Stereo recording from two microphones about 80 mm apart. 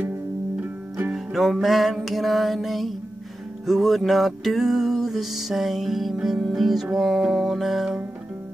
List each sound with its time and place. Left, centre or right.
1.1 s music: centre